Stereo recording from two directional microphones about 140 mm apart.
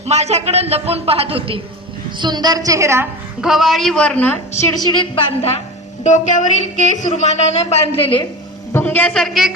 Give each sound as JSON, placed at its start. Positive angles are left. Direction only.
{"t": 0.0, "sound": "a woman's voice", "side_deg": -50}
{"t": 2.1, "sound": "a woman's voice", "side_deg": -30}
{"t": 3.4, "sound": "a man's voice", "side_deg": 0}
{"t": 4.7, "sound": "a woman's voice", "side_deg": 30}
{"t": 6.0, "sound": "a woman's voice", "side_deg": 60}
{"t": 8.7, "sound": "a woman's voice", "side_deg": 10}